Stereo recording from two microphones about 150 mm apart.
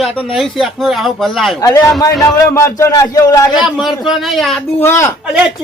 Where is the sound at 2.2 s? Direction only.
20° left (ahead or behind).